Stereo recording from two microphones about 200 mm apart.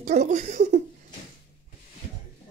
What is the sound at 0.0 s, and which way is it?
Speech, 35° right (ahead or behind).